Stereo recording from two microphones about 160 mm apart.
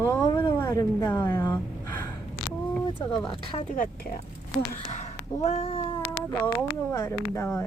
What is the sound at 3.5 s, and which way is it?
Speech, 35° left (ahead or behind).